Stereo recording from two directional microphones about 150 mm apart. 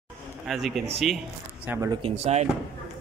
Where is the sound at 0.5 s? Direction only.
Centre (ahead or behind).